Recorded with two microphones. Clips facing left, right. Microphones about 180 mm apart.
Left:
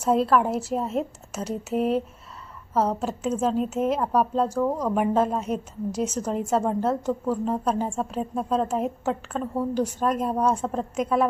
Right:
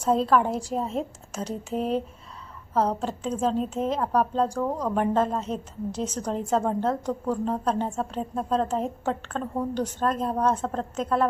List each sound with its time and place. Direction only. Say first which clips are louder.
0.0 s a woman's voice: left 1 dB; 5° left (ahead or behind)